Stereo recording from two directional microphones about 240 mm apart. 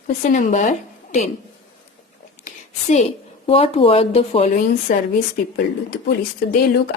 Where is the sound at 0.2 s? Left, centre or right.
Left.